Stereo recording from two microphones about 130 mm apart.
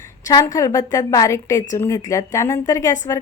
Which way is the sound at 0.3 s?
25° left (ahead or behind).